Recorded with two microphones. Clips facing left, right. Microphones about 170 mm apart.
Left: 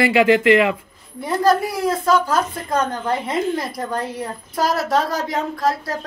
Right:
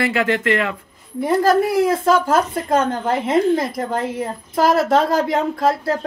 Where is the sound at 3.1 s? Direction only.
50° right (ahead or behind).